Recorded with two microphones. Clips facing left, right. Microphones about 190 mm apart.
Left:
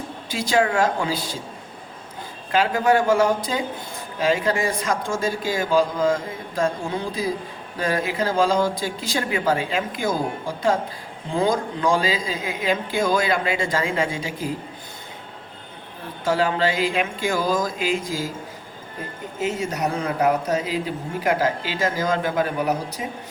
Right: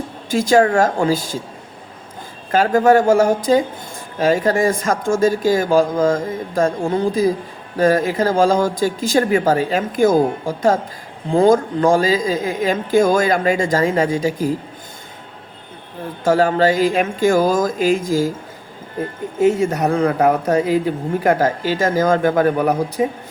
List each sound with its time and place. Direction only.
0.3 s speech: 45° right (ahead or behind)
2.5 s speech: 45° right (ahead or behind)
16.2 s speech: 45° right (ahead or behind)
19.4 s speech: 55° right (ahead or behind)